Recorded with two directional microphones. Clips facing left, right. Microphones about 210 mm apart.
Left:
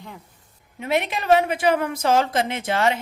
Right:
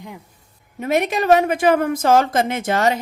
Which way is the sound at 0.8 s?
45° right (ahead or behind).